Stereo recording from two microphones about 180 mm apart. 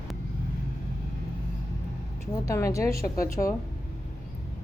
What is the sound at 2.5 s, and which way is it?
Speech, 15° left (ahead or behind).